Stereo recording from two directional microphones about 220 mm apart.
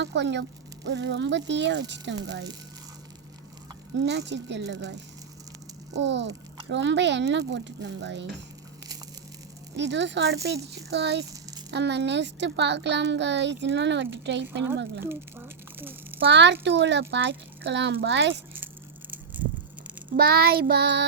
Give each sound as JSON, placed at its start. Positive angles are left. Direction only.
{"t": 0.0, "sound": "a child's voice", "side_deg": -50}
{"t": 3.9, "sound": "a child's voice", "side_deg": -50}
{"t": 9.7, "sound": "a child's voice", "side_deg": -50}
{"t": 15.0, "sound": "a sound", "side_deg": -10}
{"t": 16.3, "sound": "a child's voice", "side_deg": -50}
{"t": 20.1, "sound": "a child's voice", "side_deg": -45}